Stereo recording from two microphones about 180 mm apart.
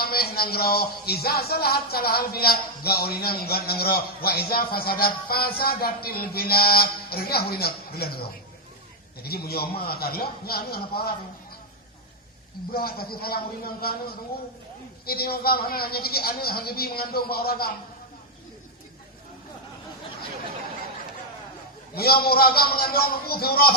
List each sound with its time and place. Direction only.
0.0 s speech: 60° left (ahead or behind)
12.7 s speech: 55° left (ahead or behind)
21.9 s speech: 60° left (ahead or behind)